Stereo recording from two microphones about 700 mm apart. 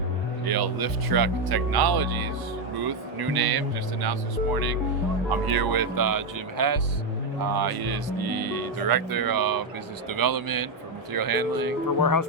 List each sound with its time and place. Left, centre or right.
0.4 s speech: right
11.9 s speech: left